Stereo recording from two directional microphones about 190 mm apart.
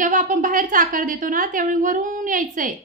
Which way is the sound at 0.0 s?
45° right (ahead or behind).